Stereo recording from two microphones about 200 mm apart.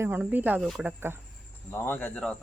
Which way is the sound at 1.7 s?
10° left (ahead or behind).